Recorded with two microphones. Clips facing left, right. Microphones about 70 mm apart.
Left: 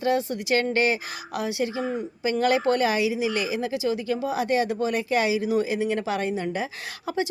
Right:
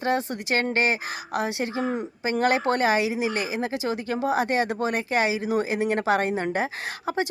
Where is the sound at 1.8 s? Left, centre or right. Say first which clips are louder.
Right 1 dB; right.